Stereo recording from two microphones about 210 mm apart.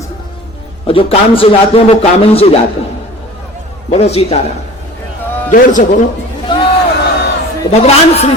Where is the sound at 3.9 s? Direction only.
30° left (ahead or behind).